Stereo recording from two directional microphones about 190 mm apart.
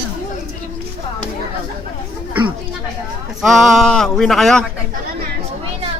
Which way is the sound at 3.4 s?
Centre (ahead or behind).